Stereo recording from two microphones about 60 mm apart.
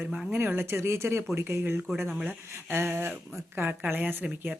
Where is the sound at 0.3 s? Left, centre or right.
Right.